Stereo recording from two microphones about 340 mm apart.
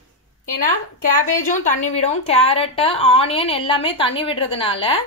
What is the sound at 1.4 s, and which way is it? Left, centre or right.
A woman's voice, left.